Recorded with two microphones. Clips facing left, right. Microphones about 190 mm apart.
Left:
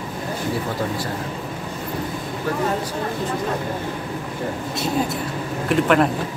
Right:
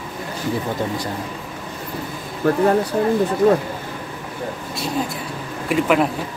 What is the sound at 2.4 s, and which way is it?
Speech, 55° right (ahead or behind).